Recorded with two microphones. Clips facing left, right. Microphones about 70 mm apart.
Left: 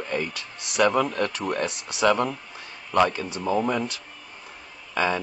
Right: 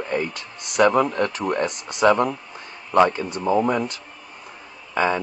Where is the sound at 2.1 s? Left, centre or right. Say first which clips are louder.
Right 4 dB; right.